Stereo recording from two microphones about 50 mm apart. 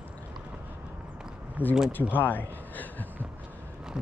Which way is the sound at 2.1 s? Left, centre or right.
Left.